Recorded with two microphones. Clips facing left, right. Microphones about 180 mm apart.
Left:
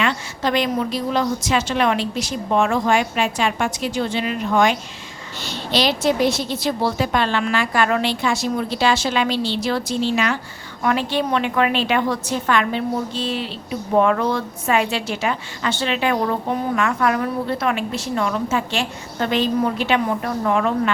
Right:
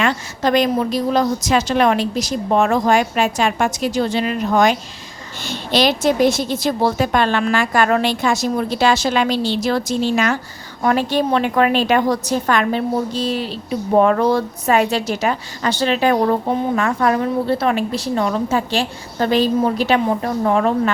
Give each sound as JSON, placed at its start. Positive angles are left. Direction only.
{"t": 0.0, "sound": "a woman's voice", "side_deg": -45}